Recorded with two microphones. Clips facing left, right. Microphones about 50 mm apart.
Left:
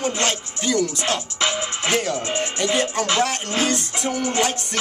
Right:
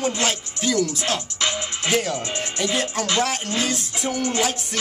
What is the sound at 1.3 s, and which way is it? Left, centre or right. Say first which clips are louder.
Music: left 2 dB; centre.